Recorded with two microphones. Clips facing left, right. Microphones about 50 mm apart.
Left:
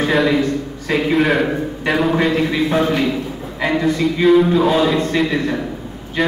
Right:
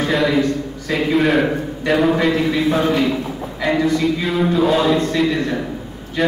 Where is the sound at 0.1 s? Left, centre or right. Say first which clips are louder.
Even; centre.